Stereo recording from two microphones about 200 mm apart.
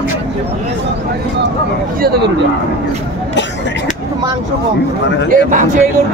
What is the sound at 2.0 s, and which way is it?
Speech, 55° right (ahead or behind).